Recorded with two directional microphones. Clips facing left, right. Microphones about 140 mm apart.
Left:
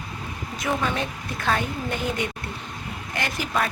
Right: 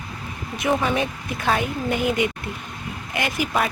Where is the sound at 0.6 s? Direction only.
15° right (ahead or behind).